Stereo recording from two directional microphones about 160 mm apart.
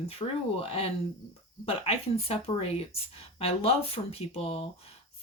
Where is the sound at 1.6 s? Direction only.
40° left (ahead or behind).